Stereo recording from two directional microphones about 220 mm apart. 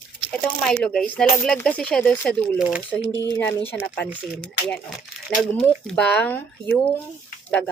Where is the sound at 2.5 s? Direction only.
5° right (ahead or behind).